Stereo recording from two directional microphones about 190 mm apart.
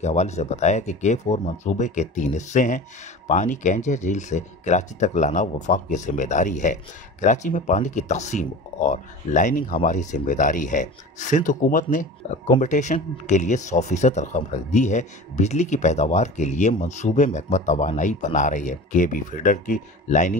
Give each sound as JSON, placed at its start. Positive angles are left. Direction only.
{"t": 0.0, "sound": "speech", "side_deg": 35}